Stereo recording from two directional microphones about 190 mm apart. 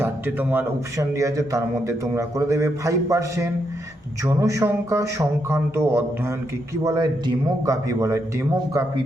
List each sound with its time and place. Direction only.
0.0 s a man's voice: 10° right (ahead or behind)